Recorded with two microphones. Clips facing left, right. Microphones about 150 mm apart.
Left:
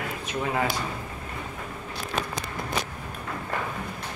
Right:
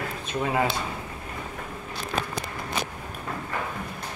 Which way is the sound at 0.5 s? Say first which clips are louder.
Right 2 dB; 25° right (ahead or behind).